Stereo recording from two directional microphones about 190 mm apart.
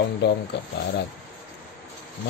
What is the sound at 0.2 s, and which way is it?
Speech, 60° left (ahead or behind).